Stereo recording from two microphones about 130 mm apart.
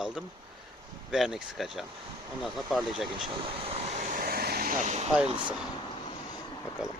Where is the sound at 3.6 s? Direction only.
55° right (ahead or behind).